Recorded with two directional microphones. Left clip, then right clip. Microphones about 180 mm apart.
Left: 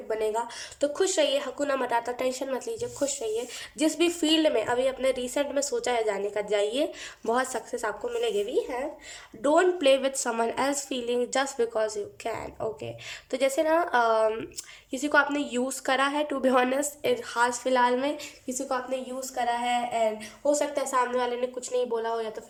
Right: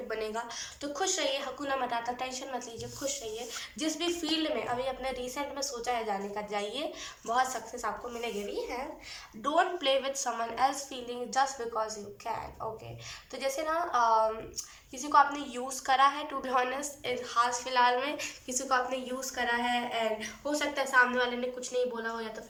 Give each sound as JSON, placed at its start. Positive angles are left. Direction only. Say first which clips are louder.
{"t": 0.1, "sound": "speech", "louder": "left 9 dB", "side_deg": 40}
{"t": 18.4, "sound": "a woman's voice", "louder": "even", "side_deg": 25}